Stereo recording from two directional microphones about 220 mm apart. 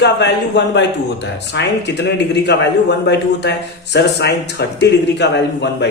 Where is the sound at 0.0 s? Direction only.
50° left (ahead or behind).